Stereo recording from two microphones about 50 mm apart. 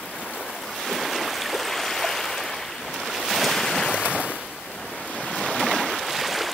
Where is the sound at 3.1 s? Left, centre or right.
Centre.